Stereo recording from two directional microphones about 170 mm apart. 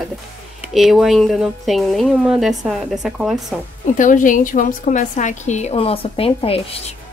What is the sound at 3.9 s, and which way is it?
A woman's voice, 50° left (ahead or behind).